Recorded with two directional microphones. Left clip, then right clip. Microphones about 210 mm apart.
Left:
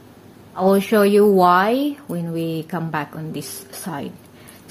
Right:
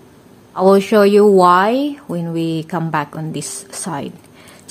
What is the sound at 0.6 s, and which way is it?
Speech, 25° right (ahead or behind).